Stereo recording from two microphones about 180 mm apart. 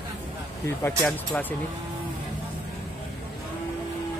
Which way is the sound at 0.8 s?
10° left (ahead or behind).